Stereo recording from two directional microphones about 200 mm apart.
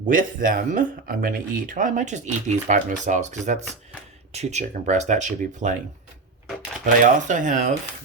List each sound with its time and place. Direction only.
0.0 s speech: 40° right (ahead or behind)
6.8 s speech: 40° right (ahead or behind)